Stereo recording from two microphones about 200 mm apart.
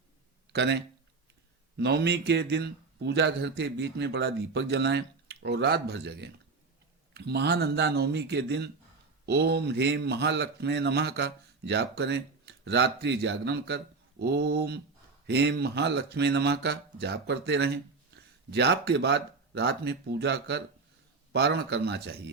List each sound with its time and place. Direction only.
0.5 s speech: 60° right (ahead or behind)